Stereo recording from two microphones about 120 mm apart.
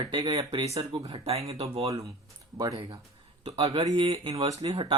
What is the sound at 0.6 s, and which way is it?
Speech, 60° right (ahead or behind).